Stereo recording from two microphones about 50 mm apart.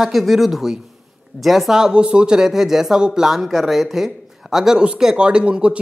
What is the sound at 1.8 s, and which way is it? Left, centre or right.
Speech, centre.